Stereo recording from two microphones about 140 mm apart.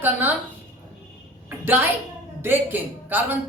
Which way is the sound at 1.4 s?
15° right (ahead or behind).